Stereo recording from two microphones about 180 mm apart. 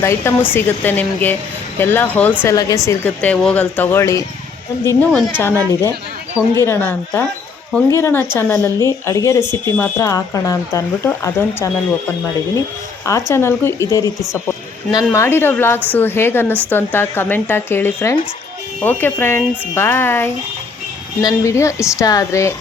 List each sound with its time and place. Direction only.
0.0 s speech: 15° left (ahead or behind)
13.1 s speech: 15° left (ahead or behind)